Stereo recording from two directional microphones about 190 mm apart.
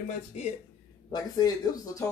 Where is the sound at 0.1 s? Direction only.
40° left (ahead or behind).